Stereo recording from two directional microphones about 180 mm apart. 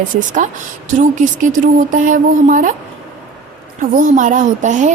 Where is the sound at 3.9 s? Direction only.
45° right (ahead or behind).